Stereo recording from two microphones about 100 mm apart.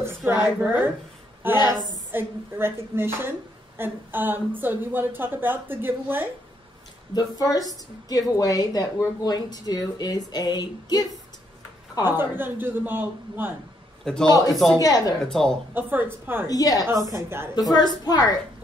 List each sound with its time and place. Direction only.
0.2 s a woman's voice: 20° right (ahead or behind)
1.5 s a woman's voice: 40° left (ahead or behind)
2.1 s a woman's voice: 25° right (ahead or behind)
7.2 s a woman's voice: 40° left (ahead or behind)
12.0 s a woman's voice: 20° right (ahead or behind)
14.0 s a woman's voice: 5° left (ahead or behind)
14.8 s a woman's voice: 40° left (ahead or behind)
15.2 s speech: 5° left (ahead or behind)
15.7 s a woman's voice: 20° right (ahead or behind)
16.4 s a woman's voice: 40° left (ahead or behind)
17.1 s a woman's voice: 25° right (ahead or behind)
17.6 s a woman's voice: 40° left (ahead or behind)